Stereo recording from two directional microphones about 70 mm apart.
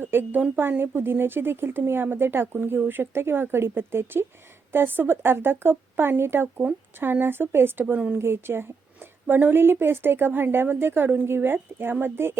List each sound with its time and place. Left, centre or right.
0.0 s speech: right
7.9 s speech: centre
8.2 s speech: right